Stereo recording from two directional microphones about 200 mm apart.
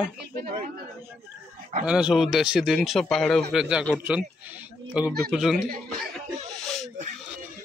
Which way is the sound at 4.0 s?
10° right (ahead or behind).